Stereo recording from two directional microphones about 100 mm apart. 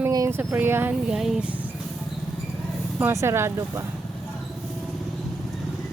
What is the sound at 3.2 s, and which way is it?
Speech, 25° right (ahead or behind).